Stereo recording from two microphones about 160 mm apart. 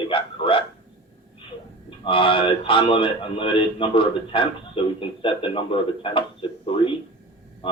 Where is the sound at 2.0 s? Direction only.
35° left (ahead or behind).